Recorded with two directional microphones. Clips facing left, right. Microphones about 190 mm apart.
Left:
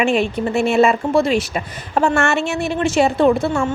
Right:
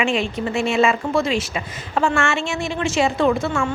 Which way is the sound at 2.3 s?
60° left (ahead or behind).